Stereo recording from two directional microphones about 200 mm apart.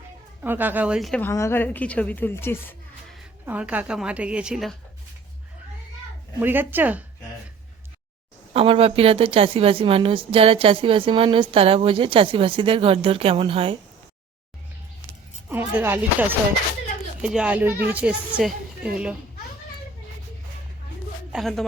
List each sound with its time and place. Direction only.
0.4 s speech: 10° right (ahead or behind)
1.3 s a woman's voice: 15° left (ahead or behind)
3.4 s a woman's voice: 5° right (ahead or behind)
6.4 s speech: 10° right (ahead or behind)
8.5 s a woman's voice: 30° right (ahead or behind)
15.4 s speech: 10° right (ahead or behind)
18.3 s a sound: 5° right (ahead or behind)
21.3 s a woman's voice: centre (ahead or behind)